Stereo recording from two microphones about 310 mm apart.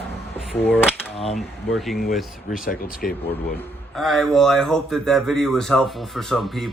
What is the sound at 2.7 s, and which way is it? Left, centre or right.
Speech, left.